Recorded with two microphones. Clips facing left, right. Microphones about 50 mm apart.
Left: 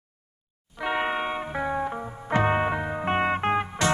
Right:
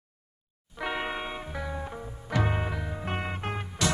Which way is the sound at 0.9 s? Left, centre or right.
Left.